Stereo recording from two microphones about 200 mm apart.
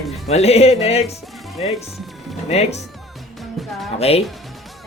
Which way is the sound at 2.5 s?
30° left (ahead or behind).